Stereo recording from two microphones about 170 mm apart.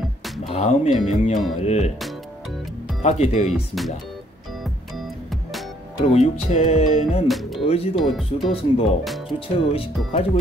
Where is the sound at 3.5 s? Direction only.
Centre (ahead or behind).